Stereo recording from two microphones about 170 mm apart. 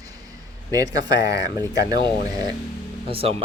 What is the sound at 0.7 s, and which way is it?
Speech, 20° right (ahead or behind).